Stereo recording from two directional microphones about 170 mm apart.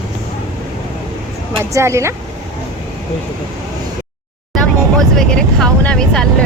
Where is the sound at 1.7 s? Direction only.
15° right (ahead or behind).